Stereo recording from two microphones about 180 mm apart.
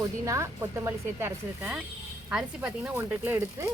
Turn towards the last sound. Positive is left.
turn(degrees=-15)  # may be behind; listen again after turning